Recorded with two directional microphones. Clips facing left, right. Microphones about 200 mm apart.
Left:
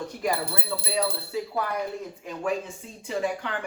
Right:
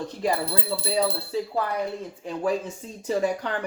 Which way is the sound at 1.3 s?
30° right (ahead or behind).